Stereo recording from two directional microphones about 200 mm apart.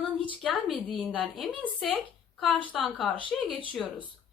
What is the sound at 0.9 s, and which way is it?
Speech, 5° left (ahead or behind).